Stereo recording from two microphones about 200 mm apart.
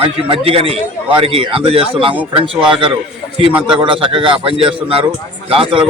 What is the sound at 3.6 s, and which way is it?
A man's voice, 25° right (ahead or behind).